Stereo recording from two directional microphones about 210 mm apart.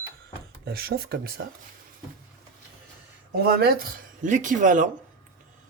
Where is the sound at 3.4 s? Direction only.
50° right (ahead or behind).